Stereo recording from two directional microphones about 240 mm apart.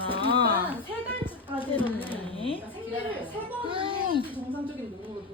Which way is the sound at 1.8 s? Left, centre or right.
Centre.